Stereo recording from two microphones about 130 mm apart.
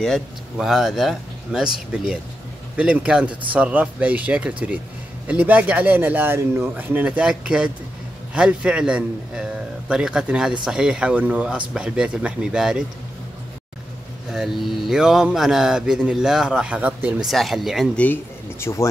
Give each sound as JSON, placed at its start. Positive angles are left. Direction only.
{"t": 0.0, "sound": "speech", "side_deg": 0}
{"t": 14.3, "sound": "speech", "side_deg": -5}
{"t": 17.3, "sound": "speech", "side_deg": 0}
{"t": 17.9, "sound": "speech", "side_deg": 15}